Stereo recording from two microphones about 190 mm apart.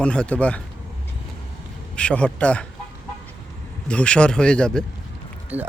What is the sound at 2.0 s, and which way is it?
Speech, 5° left (ahead or behind).